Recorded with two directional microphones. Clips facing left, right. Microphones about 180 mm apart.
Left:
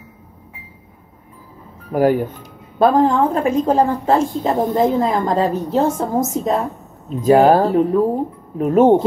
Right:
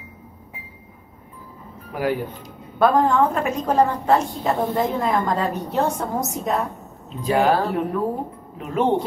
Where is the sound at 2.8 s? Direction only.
25° left (ahead or behind).